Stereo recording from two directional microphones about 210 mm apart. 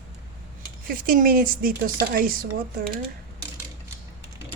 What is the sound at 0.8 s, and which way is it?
Speech, 45° right (ahead or behind).